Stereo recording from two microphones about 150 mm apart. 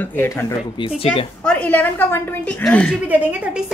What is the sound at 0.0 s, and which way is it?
Speech, 15° left (ahead or behind).